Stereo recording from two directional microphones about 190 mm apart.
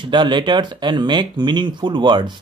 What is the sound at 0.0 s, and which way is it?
A man's voice, 25° right (ahead or behind).